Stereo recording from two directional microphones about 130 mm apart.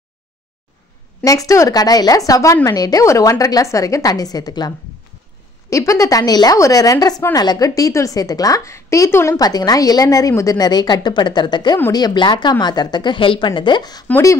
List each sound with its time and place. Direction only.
1.2 s a woman's voice: 25° left (ahead or behind)